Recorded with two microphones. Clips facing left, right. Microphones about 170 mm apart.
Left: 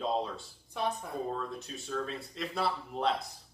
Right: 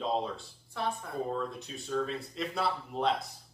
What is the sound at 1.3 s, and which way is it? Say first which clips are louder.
Speech: right 2 dB; centre (ahead or behind).